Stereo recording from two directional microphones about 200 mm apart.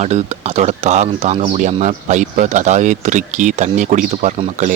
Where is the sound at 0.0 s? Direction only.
35° right (ahead or behind).